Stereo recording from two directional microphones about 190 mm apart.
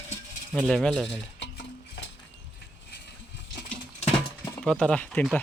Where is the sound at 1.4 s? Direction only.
70° left (ahead or behind).